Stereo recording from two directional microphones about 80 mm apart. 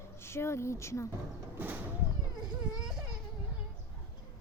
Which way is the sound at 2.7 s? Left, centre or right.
Centre.